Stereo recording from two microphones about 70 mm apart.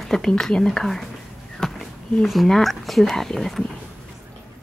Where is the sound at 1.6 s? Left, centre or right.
Centre.